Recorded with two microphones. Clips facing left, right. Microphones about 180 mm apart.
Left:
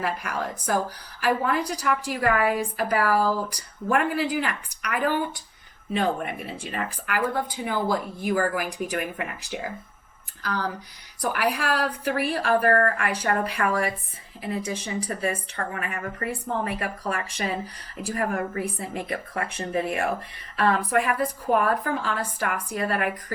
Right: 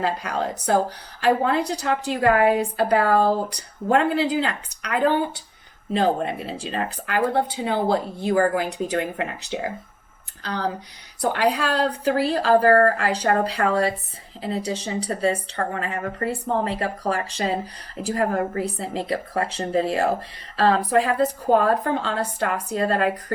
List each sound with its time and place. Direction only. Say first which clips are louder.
0.0 s a woman's voice: right 4 dB; 25° right (ahead or behind)